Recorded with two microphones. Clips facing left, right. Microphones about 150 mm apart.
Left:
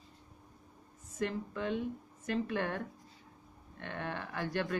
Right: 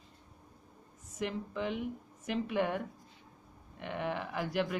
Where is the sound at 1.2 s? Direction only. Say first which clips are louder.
Even; 15° right (ahead or behind).